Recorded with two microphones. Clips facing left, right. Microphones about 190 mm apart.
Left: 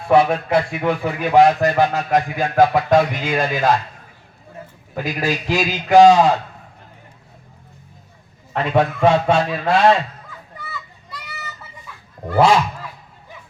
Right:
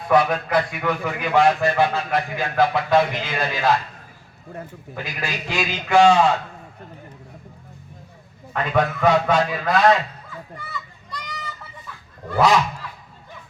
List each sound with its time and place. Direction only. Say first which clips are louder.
0.1 s a man's voice: left 4 dB; 25° left (ahead or behind); by 3.6 s 45° left (ahead or behind)
4.9 s a man's voice: left 8 dB; 40° left (ahead or behind)
8.5 s a man's voice: left 3 dB; 30° left (ahead or behind)
10.2 s children playing: right 1 dB; centre (ahead or behind)